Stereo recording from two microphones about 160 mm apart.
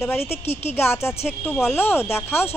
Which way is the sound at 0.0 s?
15° left (ahead or behind).